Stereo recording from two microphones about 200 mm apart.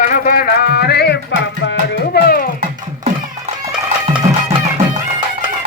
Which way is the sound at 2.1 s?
50° left (ahead or behind).